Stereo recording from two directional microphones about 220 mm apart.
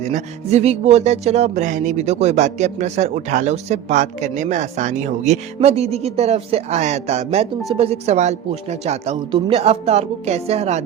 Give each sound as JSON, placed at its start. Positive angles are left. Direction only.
{"t": 0.1, "sound": "a man's voice", "side_deg": -30}